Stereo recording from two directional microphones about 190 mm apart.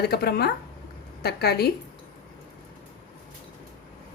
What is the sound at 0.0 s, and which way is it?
A woman's voice, 55° left (ahead or behind).